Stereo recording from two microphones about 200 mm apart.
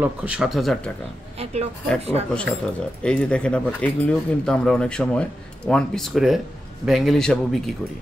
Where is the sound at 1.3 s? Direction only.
30° right (ahead or behind).